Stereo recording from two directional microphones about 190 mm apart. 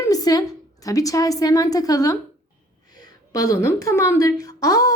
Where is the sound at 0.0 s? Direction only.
20° left (ahead or behind).